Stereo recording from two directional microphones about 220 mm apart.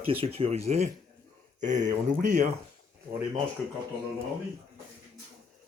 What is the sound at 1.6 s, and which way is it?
Speech, 35° right (ahead or behind).